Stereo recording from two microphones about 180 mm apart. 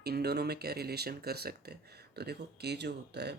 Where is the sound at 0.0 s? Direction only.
60° right (ahead or behind).